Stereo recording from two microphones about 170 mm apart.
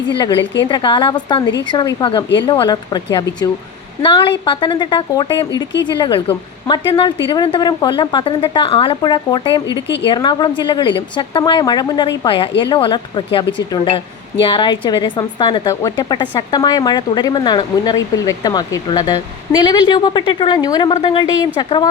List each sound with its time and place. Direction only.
0.1 s a woman's voice: 25° left (ahead or behind)
9.8 s a woman's voice: 90° left
10.1 s a woman's voice: 25° left (ahead or behind)
14.4 s a woman's voice: 30° left (ahead or behind)